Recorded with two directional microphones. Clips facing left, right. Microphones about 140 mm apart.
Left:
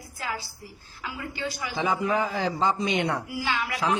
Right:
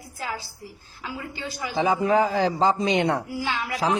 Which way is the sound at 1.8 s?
35° right (ahead or behind).